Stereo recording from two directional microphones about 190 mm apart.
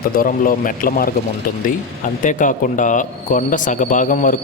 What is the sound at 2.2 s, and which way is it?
A man's voice, 45° left (ahead or behind).